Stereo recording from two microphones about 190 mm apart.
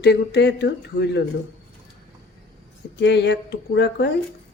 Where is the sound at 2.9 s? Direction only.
65° left (ahead or behind).